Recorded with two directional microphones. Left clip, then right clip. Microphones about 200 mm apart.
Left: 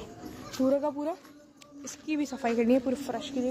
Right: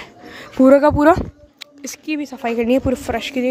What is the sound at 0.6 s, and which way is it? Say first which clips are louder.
Speech: right 16 dB; 55° right (ahead or behind).